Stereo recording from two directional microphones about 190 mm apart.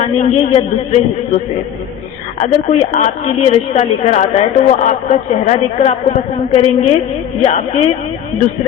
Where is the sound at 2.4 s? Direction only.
40° left (ahead or behind).